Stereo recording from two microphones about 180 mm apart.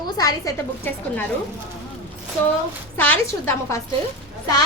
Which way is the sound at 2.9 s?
10° left (ahead or behind).